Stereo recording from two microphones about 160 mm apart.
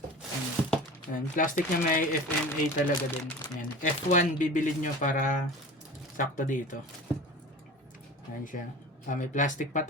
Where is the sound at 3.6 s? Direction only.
55° left (ahead or behind).